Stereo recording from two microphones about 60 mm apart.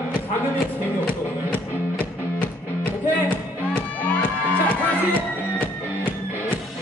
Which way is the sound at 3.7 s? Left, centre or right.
Left.